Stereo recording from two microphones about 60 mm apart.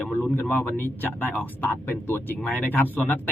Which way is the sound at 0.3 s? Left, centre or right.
Left.